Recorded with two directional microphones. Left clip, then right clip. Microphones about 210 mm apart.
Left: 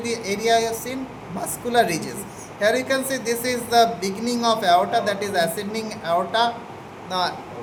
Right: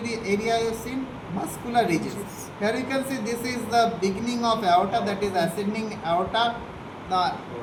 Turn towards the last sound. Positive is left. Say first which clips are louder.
# even
turn(degrees=45)  # may be behind; listen again after turning